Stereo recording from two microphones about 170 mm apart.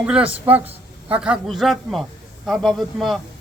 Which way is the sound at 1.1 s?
5° right (ahead or behind).